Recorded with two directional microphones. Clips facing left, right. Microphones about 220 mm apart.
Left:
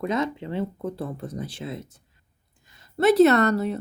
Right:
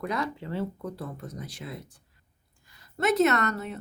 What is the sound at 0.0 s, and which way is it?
A woman's voice, 20° left (ahead or behind).